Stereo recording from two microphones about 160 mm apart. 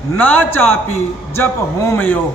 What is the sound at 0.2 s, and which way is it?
Speech, 10° left (ahead or behind).